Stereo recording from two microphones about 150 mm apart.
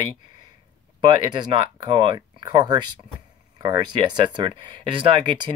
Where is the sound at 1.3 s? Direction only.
30° right (ahead or behind).